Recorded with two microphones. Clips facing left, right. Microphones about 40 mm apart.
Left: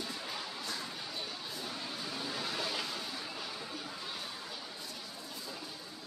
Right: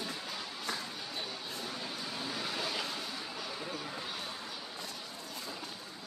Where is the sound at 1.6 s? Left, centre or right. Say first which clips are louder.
Even; centre.